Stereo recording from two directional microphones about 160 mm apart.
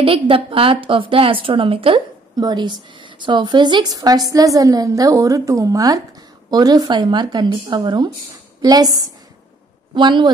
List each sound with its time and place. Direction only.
0.0 s a woman's voice: 35° right (ahead or behind)